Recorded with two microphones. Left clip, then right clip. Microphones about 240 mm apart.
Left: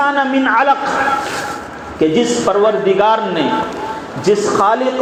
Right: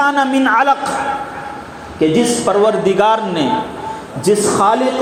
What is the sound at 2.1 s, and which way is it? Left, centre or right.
A man's voice, right.